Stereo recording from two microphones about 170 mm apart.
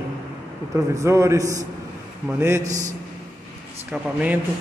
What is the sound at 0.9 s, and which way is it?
A man's voice, 15° right (ahead or behind).